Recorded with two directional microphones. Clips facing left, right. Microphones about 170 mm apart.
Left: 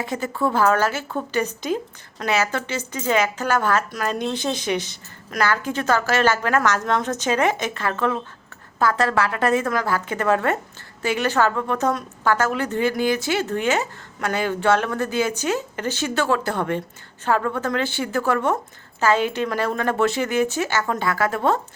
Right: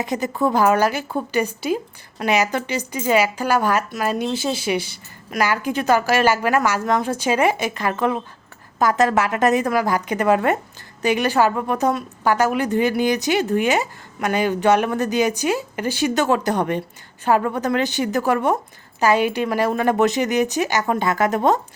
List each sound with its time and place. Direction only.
0.0 s a woman's voice: 15° right (ahead or behind)